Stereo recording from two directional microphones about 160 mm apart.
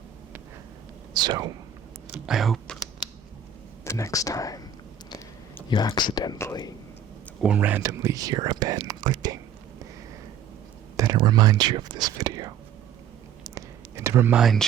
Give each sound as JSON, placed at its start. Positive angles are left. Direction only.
{"t": 1.1, "sound": "speech", "side_deg": -25}
{"t": 2.1, "sound": "speech", "side_deg": 0}
{"t": 3.8, "sound": "speech", "side_deg": 20}
{"t": 5.6, "sound": "speech", "side_deg": 25}
{"t": 7.4, "sound": "speech", "side_deg": -10}
{"t": 10.9, "sound": "speech", "side_deg": -20}
{"t": 13.4, "sound": "a sound", "side_deg": -20}
{"t": 14.3, "sound": "speech", "side_deg": 0}